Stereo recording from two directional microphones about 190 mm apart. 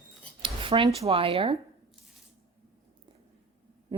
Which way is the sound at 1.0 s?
30° right (ahead or behind).